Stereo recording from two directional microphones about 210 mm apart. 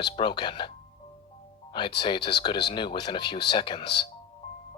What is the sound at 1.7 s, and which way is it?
Speech, 20° left (ahead or behind).